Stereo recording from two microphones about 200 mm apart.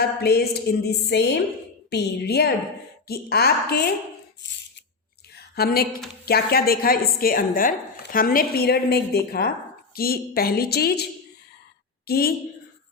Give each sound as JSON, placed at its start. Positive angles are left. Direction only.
{"t": 0.0, "sound": "a woman's voice", "side_deg": 50}
{"t": 5.3, "sound": "a sound", "side_deg": 50}
{"t": 6.2, "sound": "speech", "side_deg": 50}
{"t": 12.0, "sound": "a woman's voice", "side_deg": 50}